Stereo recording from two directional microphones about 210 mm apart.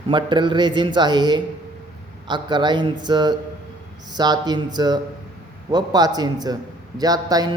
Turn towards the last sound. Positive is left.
turn(degrees=-15)  # may be behind; listen again after turning